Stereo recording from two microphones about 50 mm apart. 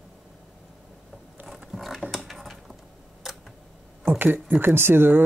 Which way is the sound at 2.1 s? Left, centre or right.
Centre.